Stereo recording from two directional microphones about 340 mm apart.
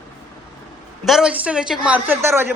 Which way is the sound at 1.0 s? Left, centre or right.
Centre.